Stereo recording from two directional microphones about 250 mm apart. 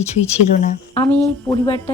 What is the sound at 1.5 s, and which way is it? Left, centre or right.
Speech, centre.